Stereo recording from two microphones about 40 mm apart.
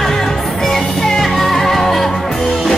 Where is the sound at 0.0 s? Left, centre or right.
Centre.